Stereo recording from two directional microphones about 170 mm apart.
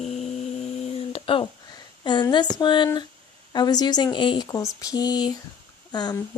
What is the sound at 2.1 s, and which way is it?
Speech, 25° left (ahead or behind).